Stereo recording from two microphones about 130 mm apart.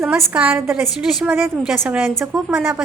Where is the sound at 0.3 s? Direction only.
10° right (ahead or behind).